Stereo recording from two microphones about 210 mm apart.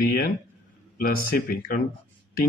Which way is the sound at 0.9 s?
45° left (ahead or behind).